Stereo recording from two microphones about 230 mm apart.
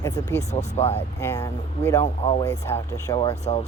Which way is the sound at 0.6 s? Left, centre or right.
Left.